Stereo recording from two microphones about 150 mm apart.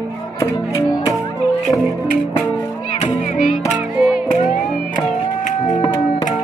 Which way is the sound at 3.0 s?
50° left (ahead or behind).